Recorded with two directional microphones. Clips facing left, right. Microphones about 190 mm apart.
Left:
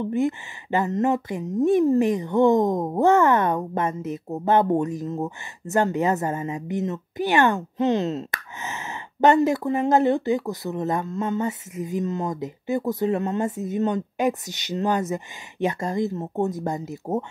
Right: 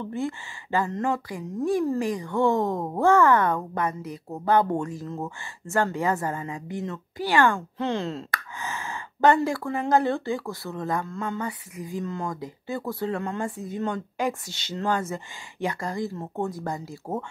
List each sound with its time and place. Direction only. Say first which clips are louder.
0.0 s a woman's voice: left 6 dB; 20° left (ahead or behind)